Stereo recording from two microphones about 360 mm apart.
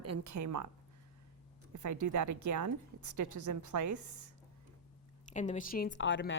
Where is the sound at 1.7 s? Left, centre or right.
Right.